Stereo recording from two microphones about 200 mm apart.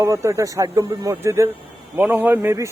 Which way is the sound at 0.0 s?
15° right (ahead or behind).